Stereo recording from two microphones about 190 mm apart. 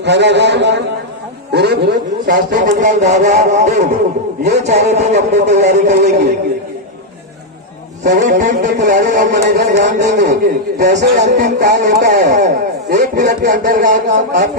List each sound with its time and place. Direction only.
0.0 s a man's voice: 65° right (ahead or behind)
2.2 s speech: 45° right (ahead or behind)
8.0 s speech: 40° right (ahead or behind)
10.1 s a man's voice: 65° right (ahead or behind)
10.8 s speech: 40° right (ahead or behind)